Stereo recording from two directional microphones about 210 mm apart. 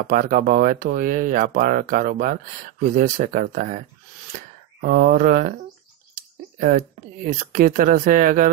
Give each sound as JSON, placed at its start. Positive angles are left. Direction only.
{"t": 0.0, "sound": "speech", "side_deg": -40}
{"t": 7.2, "sound": "speech", "side_deg": -40}